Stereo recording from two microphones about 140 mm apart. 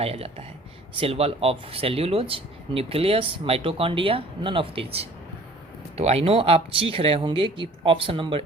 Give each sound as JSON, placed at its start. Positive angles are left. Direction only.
{"t": 0.0, "sound": "speech", "side_deg": -45}